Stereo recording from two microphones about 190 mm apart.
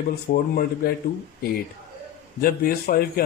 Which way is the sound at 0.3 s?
50° left (ahead or behind).